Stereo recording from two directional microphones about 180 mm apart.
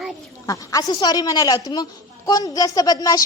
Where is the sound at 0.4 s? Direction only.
20° left (ahead or behind).